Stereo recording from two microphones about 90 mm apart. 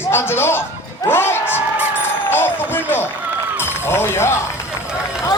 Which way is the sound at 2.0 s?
25° left (ahead or behind).